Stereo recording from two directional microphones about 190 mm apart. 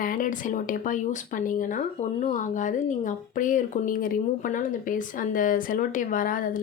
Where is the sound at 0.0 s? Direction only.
45° left (ahead or behind).